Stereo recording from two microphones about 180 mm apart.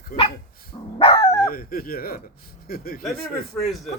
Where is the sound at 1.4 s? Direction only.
55° left (ahead or behind).